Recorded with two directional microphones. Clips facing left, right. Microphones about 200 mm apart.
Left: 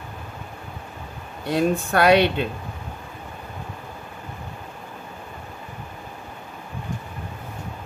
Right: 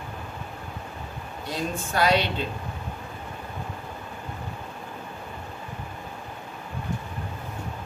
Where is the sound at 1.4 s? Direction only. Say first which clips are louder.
Left 9 dB; 60° left (ahead or behind).